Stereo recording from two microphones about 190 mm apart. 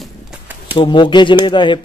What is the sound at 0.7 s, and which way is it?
A man's voice, 25° left (ahead or behind).